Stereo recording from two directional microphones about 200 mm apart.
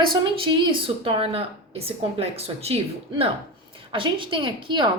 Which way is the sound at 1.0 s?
25° right (ahead or behind).